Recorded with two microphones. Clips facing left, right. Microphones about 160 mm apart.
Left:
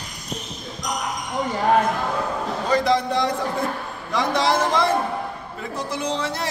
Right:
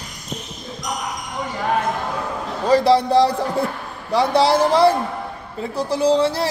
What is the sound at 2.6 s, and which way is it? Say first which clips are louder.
Speech: right 6 dB; 30° right (ahead or behind).